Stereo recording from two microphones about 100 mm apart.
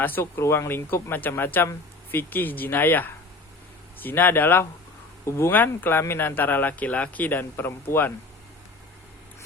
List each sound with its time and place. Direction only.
0.0 s speech: 20° left (ahead or behind)